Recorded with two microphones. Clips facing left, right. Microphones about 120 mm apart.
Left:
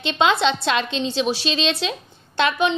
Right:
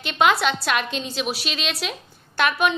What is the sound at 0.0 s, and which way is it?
A woman's voice, 25° left (ahead or behind).